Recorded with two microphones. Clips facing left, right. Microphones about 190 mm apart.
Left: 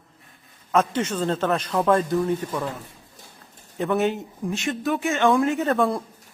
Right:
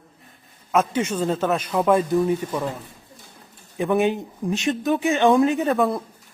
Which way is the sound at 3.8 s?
15° right (ahead or behind).